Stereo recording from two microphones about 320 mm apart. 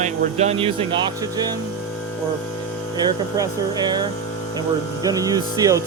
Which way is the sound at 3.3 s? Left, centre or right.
Centre.